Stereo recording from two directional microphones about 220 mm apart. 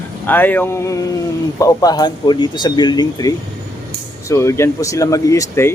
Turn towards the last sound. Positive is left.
turn(degrees=15)  # may be behind; listen again after turning